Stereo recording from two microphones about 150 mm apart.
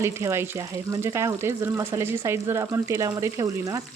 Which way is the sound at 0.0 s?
20° right (ahead or behind).